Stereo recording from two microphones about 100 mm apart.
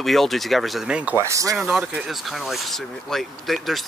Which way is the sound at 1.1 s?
30° right (ahead or behind).